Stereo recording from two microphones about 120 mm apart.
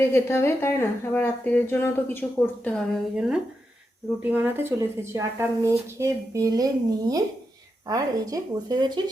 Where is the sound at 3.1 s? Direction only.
10° right (ahead or behind).